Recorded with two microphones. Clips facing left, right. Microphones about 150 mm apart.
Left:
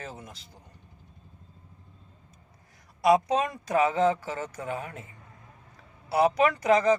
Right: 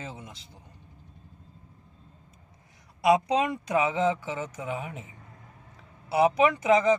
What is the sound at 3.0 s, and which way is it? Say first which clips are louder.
Speech: even; 25° right (ahead or behind).